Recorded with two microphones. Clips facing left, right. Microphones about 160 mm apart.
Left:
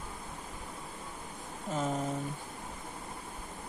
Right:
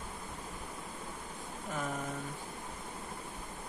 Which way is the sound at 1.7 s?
25° left (ahead or behind).